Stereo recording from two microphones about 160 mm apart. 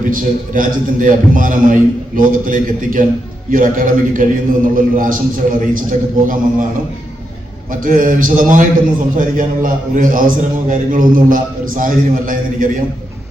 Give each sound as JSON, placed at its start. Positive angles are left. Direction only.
{"t": 0.1, "sound": "a man's voice", "side_deg": -60}
{"t": 7.7, "sound": "a man's voice", "side_deg": -55}